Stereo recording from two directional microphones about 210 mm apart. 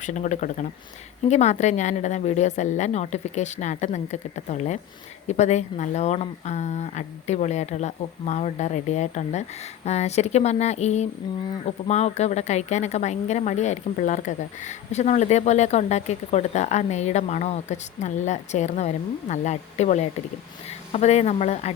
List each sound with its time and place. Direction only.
0.0 s a woman's voice: 35° left (ahead or behind)